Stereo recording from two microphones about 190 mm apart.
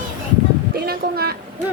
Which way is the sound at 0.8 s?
55° right (ahead or behind).